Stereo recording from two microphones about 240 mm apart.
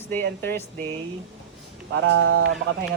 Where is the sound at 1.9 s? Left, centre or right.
Right.